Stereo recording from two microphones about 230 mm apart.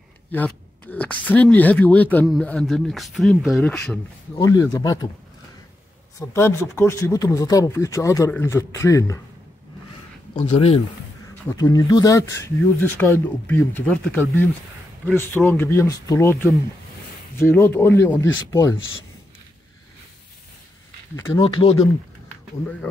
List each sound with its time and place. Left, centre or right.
0.3 s speech: centre
6.1 s speech: centre
10.3 s speech: left
21.2 s speech: centre